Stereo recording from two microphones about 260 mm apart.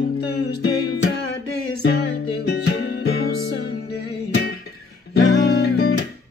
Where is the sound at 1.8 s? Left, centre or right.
Left.